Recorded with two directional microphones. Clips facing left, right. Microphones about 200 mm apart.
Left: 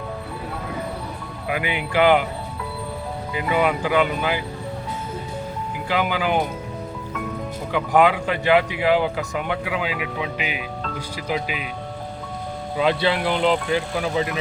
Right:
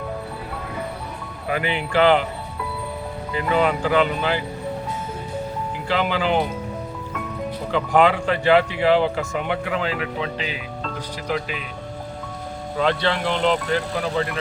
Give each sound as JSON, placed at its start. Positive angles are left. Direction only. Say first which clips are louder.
{"t": 1.5, "sound": "speech", "louder": "right 1 dB", "side_deg": 10}
{"t": 3.3, "sound": "speech", "louder": "right 1 dB", "side_deg": 10}
{"t": 5.9, "sound": "speech", "louder": "right 1 dB", "side_deg": 10}
{"t": 7.7, "sound": "speech", "louder": "even", "side_deg": 10}
{"t": 12.8, "sound": "speech", "louder": "left 1 dB", "side_deg": 10}